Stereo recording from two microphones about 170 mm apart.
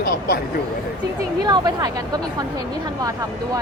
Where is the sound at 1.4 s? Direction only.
25° right (ahead or behind).